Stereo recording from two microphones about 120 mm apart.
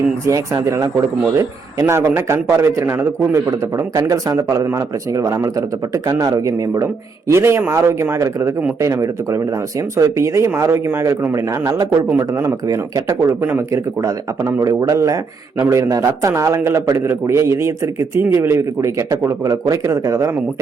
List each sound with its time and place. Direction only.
0.3 s speech: 25° right (ahead or behind)
13.4 s speech: 15° right (ahead or behind)
14.0 s speech: 30° right (ahead or behind)